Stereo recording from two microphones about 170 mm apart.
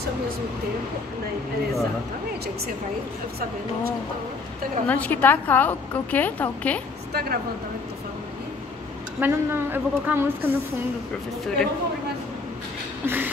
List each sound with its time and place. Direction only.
4.8 s a woman's voice: 10° left (ahead or behind)
7.1 s a woman's voice: 70° right (ahead or behind)
9.2 s a woman's voice: 10° right (ahead or behind)
11.4 s speech: 5° left (ahead or behind)
13.0 s a woman's voice: 10° right (ahead or behind)